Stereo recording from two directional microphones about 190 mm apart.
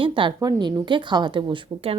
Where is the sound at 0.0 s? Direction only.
25° right (ahead or behind).